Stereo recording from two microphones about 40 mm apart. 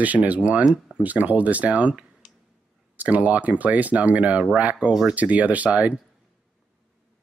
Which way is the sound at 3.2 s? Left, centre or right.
Right.